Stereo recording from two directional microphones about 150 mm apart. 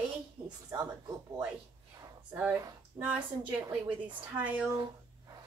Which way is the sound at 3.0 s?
10° right (ahead or behind).